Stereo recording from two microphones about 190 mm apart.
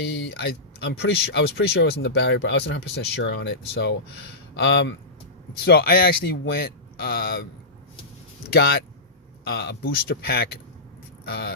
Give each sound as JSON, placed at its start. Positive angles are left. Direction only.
{"t": 0.1, "sound": "speech", "side_deg": 65}
{"t": 5.6, "sound": "speech", "side_deg": 55}
{"t": 8.4, "sound": "speech", "side_deg": 55}